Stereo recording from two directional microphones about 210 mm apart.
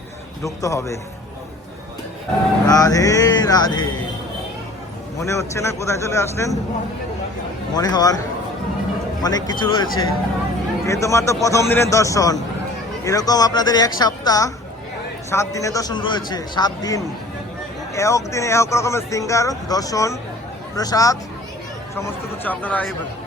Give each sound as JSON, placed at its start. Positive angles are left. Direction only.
{"t": 0.4, "sound": "speech", "side_deg": 15}
{"t": 2.6, "sound": "speech", "side_deg": 15}
{"t": 5.2, "sound": "speech", "side_deg": 15}
{"t": 7.8, "sound": "speech", "side_deg": 20}
{"t": 9.2, "sound": "speech", "side_deg": 20}